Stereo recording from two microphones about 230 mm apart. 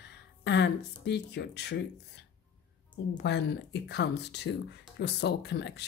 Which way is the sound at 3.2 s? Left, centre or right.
Left.